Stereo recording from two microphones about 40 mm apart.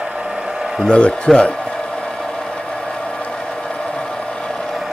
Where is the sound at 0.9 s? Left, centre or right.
Left.